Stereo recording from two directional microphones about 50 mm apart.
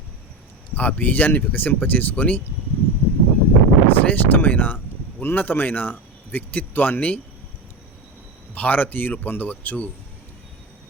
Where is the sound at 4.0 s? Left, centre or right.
Left.